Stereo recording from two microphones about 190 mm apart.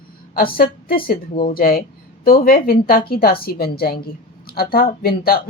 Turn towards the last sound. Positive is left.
turn(degrees=50)  # may be behind; listen again after turning